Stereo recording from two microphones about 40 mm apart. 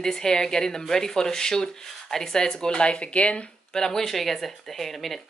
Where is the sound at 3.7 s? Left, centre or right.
Centre.